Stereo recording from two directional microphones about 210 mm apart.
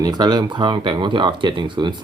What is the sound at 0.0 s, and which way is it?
Speech, 20° right (ahead or behind).